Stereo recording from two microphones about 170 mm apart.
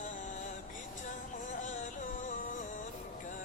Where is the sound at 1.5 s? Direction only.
50° left (ahead or behind).